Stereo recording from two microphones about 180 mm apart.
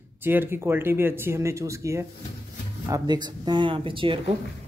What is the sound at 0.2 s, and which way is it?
A man's voice, 10° right (ahead or behind).